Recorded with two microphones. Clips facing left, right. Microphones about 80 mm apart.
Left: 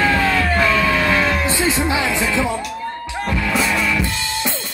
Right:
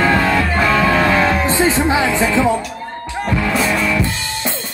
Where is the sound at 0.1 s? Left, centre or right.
Right.